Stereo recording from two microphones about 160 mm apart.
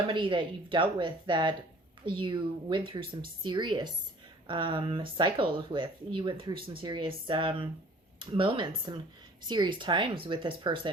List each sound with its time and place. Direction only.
0.1 s a woman's voice: 30° right (ahead or behind)